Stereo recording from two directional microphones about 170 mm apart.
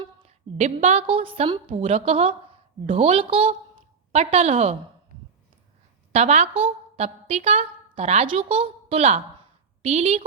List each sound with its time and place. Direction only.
0.0 s a woman's voice: 40° right (ahead or behind)
6.1 s a woman's voice: 40° right (ahead or behind)